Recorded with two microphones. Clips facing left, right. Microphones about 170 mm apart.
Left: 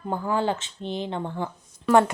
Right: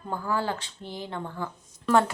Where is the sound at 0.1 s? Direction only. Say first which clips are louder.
Left 4 dB; 20° left (ahead or behind).